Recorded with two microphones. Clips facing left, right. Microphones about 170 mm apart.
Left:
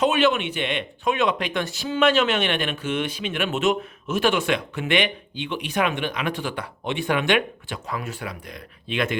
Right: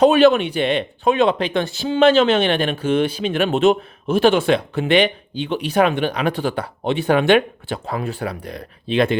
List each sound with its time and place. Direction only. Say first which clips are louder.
0.0 s speech: right 8 dB; 35° right (ahead or behind)